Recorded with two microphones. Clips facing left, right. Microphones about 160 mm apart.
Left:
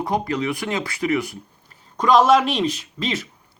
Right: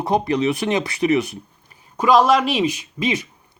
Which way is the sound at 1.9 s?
5° right (ahead or behind).